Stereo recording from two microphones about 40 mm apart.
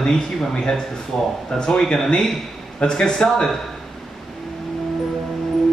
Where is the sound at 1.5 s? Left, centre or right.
Centre.